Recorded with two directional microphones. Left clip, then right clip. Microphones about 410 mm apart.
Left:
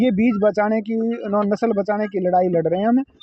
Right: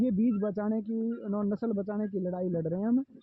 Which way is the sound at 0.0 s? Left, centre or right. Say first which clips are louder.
Left 12 dB; centre.